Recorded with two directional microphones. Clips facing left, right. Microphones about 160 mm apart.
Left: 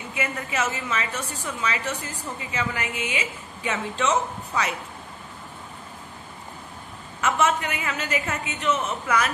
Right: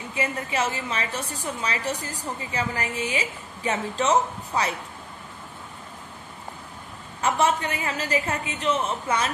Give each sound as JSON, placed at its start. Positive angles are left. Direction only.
{"t": 0.1, "sound": "a woman's voice", "side_deg": -30}
{"t": 7.2, "sound": "a woman's voice", "side_deg": -35}